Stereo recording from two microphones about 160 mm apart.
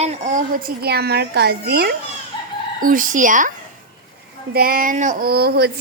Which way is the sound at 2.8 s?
55° right (ahead or behind).